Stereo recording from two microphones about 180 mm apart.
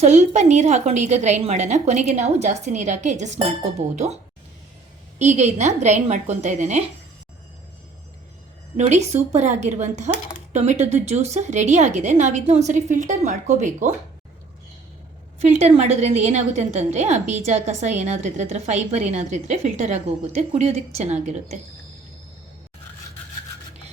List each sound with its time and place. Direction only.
0.0 s a woman's voice: 40° right (ahead or behind)
5.2 s a woman's voice: 40° right (ahead or behind)
8.7 s a woman's voice: 40° right (ahead or behind)
15.4 s a woman's voice: 40° right (ahead or behind)